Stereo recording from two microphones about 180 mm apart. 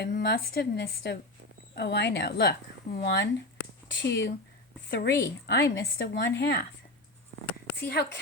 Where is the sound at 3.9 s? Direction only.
80° left.